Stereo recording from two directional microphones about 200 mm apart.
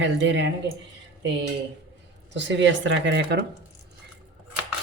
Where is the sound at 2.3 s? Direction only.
60° right (ahead or behind).